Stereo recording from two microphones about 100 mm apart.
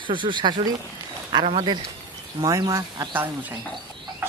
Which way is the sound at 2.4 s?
35° right (ahead or behind).